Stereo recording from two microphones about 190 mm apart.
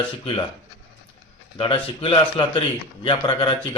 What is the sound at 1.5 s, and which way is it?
Speech, 30° left (ahead or behind).